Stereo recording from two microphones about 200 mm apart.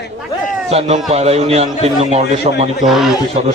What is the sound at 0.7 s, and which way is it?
Speech, 30° right (ahead or behind).